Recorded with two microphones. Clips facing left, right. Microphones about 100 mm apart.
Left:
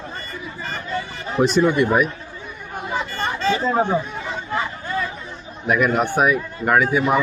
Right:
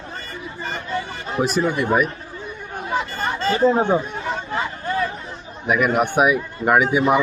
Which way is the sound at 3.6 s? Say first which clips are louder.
Right 6 dB; 20° right (ahead or behind).